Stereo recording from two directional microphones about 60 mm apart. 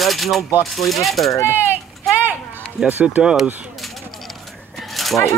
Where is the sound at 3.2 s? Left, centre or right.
Centre.